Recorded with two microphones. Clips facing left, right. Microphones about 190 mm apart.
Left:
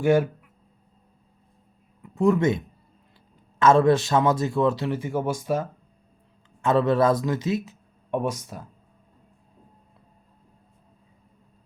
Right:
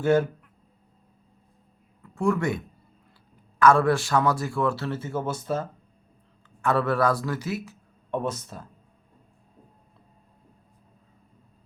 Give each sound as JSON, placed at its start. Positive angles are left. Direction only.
{"t": 0.0, "sound": "speech", "side_deg": 15}
{"t": 2.0, "sound": "a man's voice", "side_deg": 20}